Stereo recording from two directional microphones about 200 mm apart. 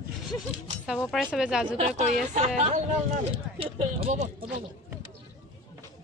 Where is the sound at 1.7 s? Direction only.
35° right (ahead or behind).